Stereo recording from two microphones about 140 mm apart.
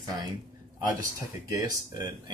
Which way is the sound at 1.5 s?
20° right (ahead or behind).